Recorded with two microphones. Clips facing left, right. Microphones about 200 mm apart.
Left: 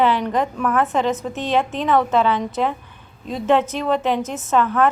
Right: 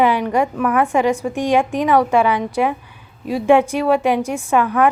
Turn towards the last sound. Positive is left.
turn(degrees=-10)  # may be behind; listen again after turning